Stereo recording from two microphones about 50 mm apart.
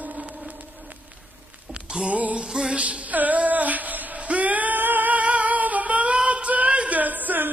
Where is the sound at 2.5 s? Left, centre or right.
Centre.